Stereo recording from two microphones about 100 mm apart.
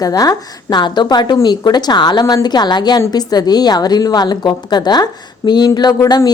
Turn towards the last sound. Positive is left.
turn(degrees=45)  # may be behind; listen again after turning